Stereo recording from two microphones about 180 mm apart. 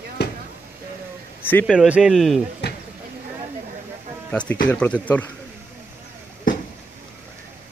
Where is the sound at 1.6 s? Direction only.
5° right (ahead or behind).